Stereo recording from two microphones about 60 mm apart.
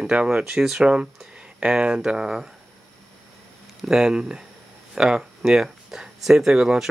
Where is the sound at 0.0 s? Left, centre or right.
Centre.